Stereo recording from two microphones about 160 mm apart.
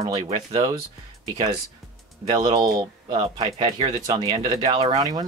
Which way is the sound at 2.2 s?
25° right (ahead or behind).